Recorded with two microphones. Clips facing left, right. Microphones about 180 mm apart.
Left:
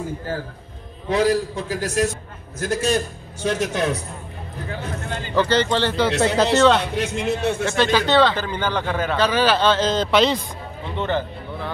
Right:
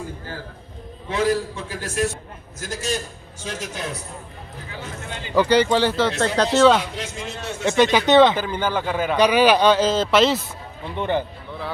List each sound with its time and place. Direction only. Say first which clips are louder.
1.1 s a man's voice: left 3 dB; 35° left (ahead or behind)
2.6 s a man's voice: left 6 dB; 60° left (ahead or behind)
5.3 s a man's voice: right 2 dB; 10° right (ahead or behind)
6.0 s speech: left 2 dB; 5° left (ahead or behind)
6.8 s a man's voice: left 7 dB; 65° left (ahead or behind)
7.6 s speech: right 6 dB; 15° right (ahead or behind)
8.4 s a man's voice: right 1 dB; 10° right (ahead or behind)
11.0 s a man's voice: even; 15° right (ahead or behind)